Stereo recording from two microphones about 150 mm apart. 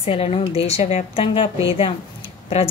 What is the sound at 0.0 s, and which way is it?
Speech, 40° left (ahead or behind).